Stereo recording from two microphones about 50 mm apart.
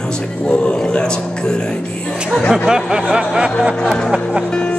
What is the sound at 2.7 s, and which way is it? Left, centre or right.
Speech, centre.